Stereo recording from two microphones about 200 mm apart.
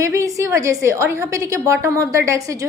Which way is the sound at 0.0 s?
15° right (ahead or behind).